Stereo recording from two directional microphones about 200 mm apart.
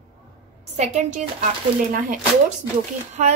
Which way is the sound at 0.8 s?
35° right (ahead or behind).